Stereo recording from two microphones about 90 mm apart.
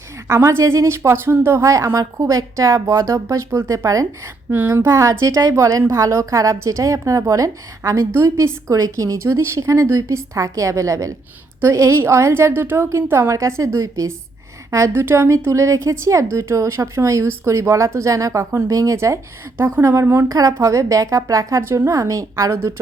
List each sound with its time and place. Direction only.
0.3 s a woman's voice: 30° right (ahead or behind)
4.4 s a woman's voice: 25° right (ahead or behind)